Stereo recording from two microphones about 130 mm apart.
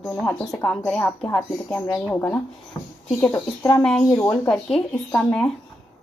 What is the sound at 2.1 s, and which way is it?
Speech, 15° left (ahead or behind).